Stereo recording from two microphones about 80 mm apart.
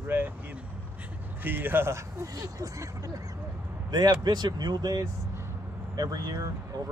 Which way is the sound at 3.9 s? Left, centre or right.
Right.